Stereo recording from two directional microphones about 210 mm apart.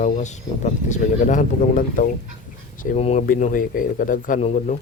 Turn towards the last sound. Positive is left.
turn(degrees=35)  # may be behind; listen again after turning